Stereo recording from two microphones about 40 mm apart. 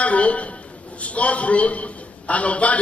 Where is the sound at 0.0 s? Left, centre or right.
Left.